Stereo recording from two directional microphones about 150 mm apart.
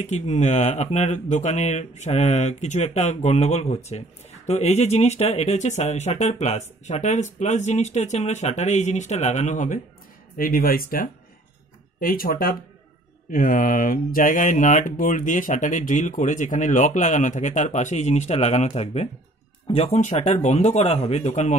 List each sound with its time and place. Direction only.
0.0 s speech: 50° left (ahead or behind)
10.3 s speech: 70° left (ahead or behind)
13.3 s speech: 70° left (ahead or behind); by 21.5 s 50° left (ahead or behind)